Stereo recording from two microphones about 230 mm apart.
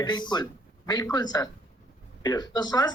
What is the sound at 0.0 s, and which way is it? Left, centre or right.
A man's voice, centre.